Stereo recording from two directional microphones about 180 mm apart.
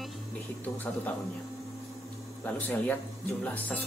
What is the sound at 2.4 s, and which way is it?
Speech, 10° left (ahead or behind).